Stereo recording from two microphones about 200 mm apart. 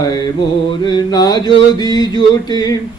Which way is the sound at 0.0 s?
20° left (ahead or behind).